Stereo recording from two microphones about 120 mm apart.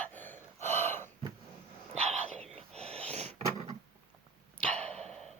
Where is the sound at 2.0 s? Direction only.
60° right (ahead or behind).